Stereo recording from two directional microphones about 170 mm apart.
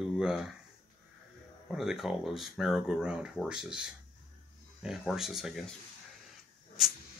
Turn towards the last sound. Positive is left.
turn(degrees=0)  # may be behind; listen again after turning